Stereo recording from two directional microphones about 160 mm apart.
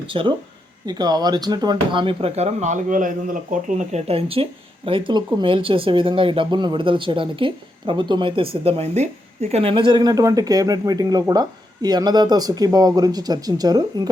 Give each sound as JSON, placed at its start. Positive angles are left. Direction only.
{"t": 0.1, "sound": "speech", "side_deg": -30}